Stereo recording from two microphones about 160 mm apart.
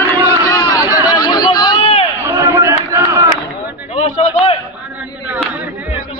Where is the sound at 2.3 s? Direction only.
15° right (ahead or behind).